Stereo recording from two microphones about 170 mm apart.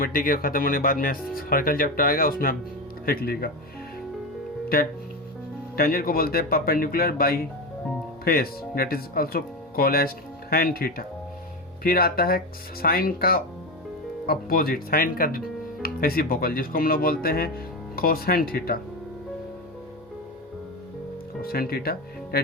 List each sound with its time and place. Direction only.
0.0 s speech: 55° left (ahead or behind)
5.7 s speech: 60° left (ahead or behind)
21.4 s speech: 60° left (ahead or behind)